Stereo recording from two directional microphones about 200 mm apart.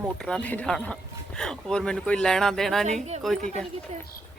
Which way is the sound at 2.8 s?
35° right (ahead or behind).